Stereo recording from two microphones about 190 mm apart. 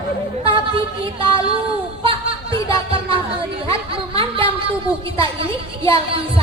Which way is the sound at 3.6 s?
30° right (ahead or behind).